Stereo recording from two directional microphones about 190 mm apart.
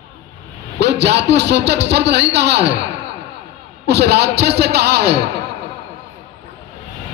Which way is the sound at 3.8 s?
60° right (ahead or behind).